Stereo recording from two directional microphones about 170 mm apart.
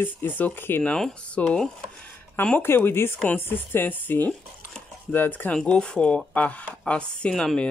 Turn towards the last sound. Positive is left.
turn(degrees=5)  # may be behind; listen again after turning